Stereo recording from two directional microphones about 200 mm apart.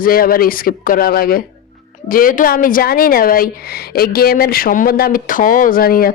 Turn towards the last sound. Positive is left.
turn(degrees=45)  # may be behind; listen again after turning